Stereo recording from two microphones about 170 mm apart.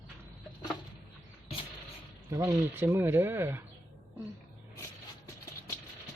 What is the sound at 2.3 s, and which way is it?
Speech, 20° right (ahead or behind).